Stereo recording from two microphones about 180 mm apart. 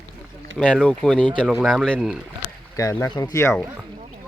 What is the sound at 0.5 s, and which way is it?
Speech, 5° left (ahead or behind).